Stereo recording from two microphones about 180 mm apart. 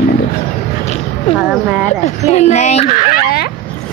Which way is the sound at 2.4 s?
40° left (ahead or behind).